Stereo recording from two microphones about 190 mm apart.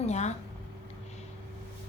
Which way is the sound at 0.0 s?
35° left (ahead or behind).